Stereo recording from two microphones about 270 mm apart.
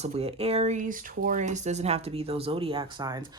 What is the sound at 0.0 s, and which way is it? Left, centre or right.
Speech, right.